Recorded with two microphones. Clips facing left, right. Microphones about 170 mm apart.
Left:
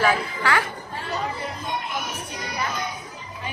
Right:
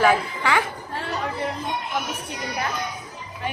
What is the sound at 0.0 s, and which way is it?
Speech, 15° right (ahead or behind).